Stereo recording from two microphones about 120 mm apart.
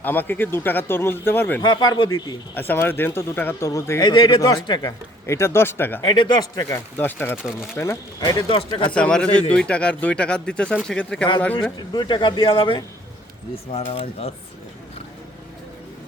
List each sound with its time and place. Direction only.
0.0 s speech: 15° left (ahead or behind)
1.6 s speech: 35° left (ahead or behind)
2.6 s speech: 15° left (ahead or behind)
4.0 s speech: 35° left (ahead or behind)
5.2 s speech: 20° left (ahead or behind)
6.0 s speech: 40° left (ahead or behind)
6.9 s speech: 15° left (ahead or behind)
8.2 s speech: 35° left (ahead or behind)
8.9 s speech: 10° left (ahead or behind)
11.8 s speech: 40° left (ahead or behind); by 14.3 s 55° left (ahead or behind)